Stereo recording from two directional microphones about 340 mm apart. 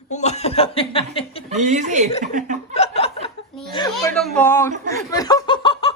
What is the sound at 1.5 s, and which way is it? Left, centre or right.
Speech, right.